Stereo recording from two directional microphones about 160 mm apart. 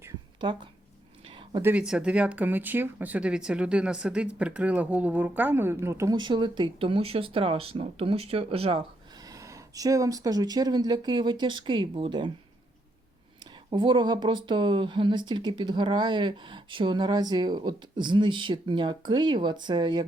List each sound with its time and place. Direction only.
0.3 s speech: 30° right (ahead or behind)
1.6 s speech: 5° right (ahead or behind); by 8.9 s 35° right (ahead or behind)
9.2 s speech: 20° right (ahead or behind)
13.7 s speech: 30° right (ahead or behind)